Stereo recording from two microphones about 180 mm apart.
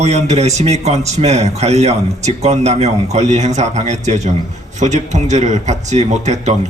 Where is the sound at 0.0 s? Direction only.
40° right (ahead or behind).